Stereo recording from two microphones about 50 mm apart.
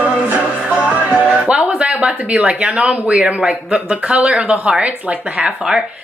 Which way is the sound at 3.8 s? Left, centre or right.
Right.